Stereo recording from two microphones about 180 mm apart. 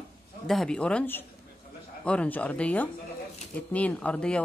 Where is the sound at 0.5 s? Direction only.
5° left (ahead or behind).